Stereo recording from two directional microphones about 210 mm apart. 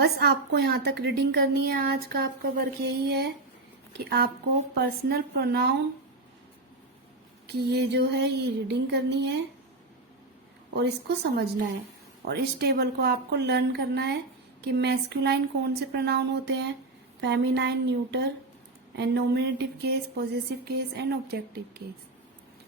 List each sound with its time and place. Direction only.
0.0 s a woman's voice: 50° right (ahead or behind)
7.4 s a woman's voice: 55° right (ahead or behind)
10.8 s a woman's voice: 55° right (ahead or behind)